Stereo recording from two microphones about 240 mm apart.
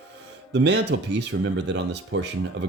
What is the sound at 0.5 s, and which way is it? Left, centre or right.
Speech, right.